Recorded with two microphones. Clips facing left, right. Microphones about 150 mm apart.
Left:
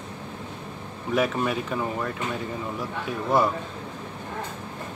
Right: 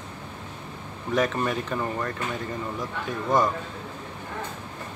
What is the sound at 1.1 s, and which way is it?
Speech, 5° left (ahead or behind).